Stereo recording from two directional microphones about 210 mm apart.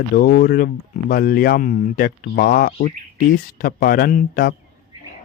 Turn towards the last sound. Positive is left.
turn(degrees=45)  # may be behind; listen again after turning